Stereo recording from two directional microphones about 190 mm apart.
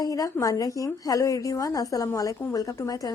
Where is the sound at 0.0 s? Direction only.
20° left (ahead or behind).